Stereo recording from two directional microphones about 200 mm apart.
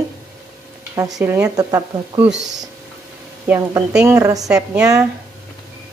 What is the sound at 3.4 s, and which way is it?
Speech, 10° right (ahead or behind).